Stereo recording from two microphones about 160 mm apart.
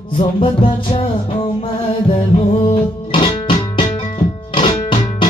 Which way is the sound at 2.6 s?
35° left (ahead or behind).